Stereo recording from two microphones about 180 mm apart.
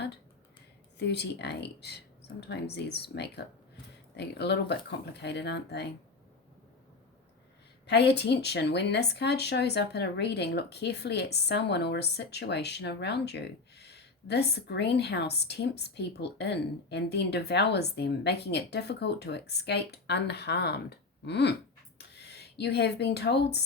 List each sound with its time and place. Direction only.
0.9 s speech: 70° left (ahead or behind)
7.9 s speech: 70° left (ahead or behind)